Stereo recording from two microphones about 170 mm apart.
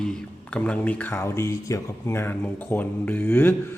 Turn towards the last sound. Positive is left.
turn(degrees=10)  # may be behind; listen again after turning